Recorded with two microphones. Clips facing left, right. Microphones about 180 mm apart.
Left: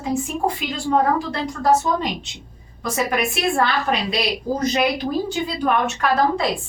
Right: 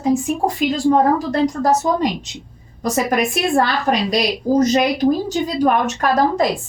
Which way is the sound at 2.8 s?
40° right (ahead or behind).